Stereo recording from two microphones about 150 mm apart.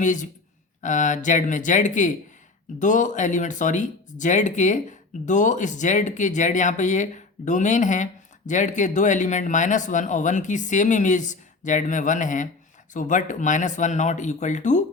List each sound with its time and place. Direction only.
0.0 s speech: 55° left (ahead or behind)